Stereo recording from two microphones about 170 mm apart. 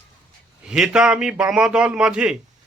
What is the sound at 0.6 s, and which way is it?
A man's voice, 5° right (ahead or behind).